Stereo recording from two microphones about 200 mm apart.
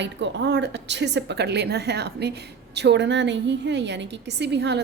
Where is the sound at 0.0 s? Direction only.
60° right (ahead or behind).